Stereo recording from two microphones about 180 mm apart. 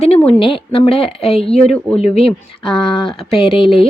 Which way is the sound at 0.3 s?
30° left (ahead or behind).